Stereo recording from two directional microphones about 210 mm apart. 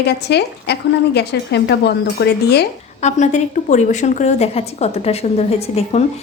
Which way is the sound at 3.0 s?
35° left (ahead or behind).